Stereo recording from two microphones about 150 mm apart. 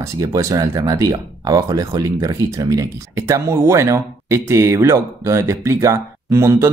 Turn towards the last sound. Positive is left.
turn(degrees=-20)  # may be behind; listen again after turning